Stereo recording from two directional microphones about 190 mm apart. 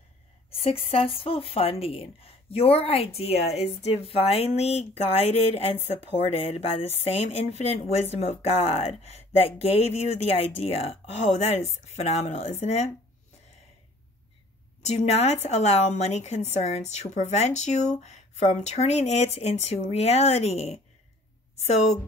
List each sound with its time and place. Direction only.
0.6 s a woman's voice: 30° left (ahead or behind)
14.8 s a woman's voice: 35° left (ahead or behind)